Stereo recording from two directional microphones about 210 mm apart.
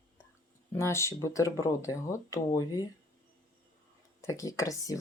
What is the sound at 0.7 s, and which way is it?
Speech, 15° left (ahead or behind).